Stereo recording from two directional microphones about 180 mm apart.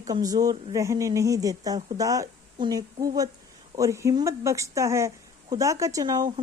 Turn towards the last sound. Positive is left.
turn(degrees=-20)  # may be behind; listen again after turning